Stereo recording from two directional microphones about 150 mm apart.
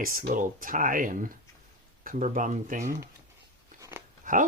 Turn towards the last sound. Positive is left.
turn(degrees=-65)  # may be behind; listen again after turning